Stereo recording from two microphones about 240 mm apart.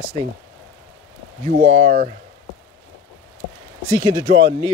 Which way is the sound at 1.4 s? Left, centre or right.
Right.